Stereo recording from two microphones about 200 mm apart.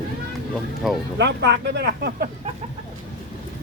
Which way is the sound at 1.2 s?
60° right (ahead or behind).